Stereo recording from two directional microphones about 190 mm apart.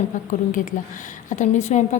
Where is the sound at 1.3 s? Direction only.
40° left (ahead or behind).